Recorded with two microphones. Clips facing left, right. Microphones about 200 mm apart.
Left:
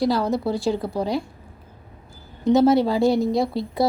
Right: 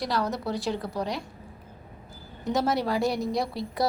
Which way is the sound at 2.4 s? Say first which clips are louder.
Left 10 dB; 25° left (ahead or behind).